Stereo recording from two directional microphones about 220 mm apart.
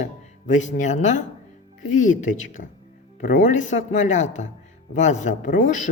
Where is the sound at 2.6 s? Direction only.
45° left (ahead or behind).